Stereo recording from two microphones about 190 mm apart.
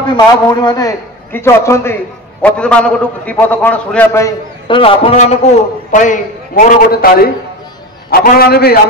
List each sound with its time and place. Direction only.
0.1 s a man's voice: 20° left (ahead or behind)
4.6 s a man's voice: 30° left (ahead or behind)
5.9 s a man's voice: 40° left (ahead or behind)